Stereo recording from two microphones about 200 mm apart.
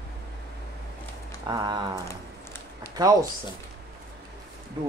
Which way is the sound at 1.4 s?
20° right (ahead or behind).